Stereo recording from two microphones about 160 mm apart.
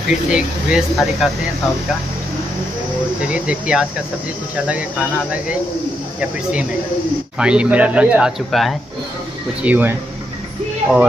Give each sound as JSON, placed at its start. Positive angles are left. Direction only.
{"t": 0.1, "sound": "speech", "side_deg": -5}
{"t": 3.3, "sound": "speech", "side_deg": -5}
{"t": 7.3, "sound": "speech", "side_deg": -5}
{"t": 9.6, "sound": "speech", "side_deg": -10}